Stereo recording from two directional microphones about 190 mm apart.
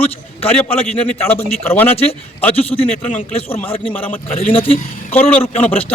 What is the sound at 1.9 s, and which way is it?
A man's voice, 30° left (ahead or behind).